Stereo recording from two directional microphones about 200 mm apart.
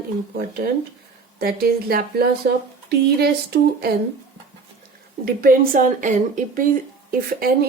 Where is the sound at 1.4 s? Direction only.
50° right (ahead or behind).